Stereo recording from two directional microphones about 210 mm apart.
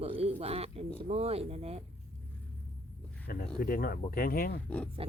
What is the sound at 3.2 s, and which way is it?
Speech, 45° left (ahead or behind).